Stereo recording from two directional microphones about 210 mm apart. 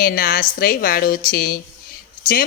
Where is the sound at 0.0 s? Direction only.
40° left (ahead or behind).